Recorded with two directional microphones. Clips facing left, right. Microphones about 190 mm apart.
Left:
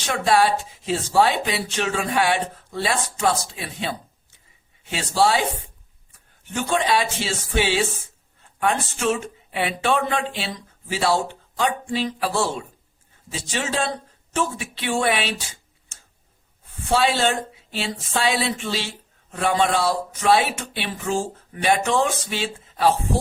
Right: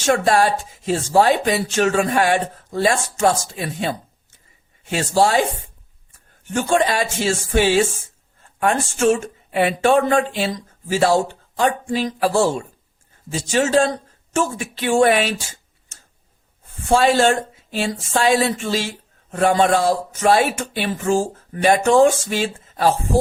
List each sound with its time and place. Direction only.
0.0 s speech: 45° right (ahead or behind)
6.5 s speech: 45° right (ahead or behind)
16.9 s speech: 45° right (ahead or behind)